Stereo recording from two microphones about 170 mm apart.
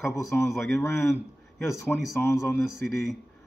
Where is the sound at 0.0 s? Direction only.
15° left (ahead or behind).